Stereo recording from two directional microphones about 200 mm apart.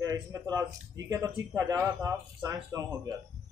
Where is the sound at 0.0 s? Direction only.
15° right (ahead or behind).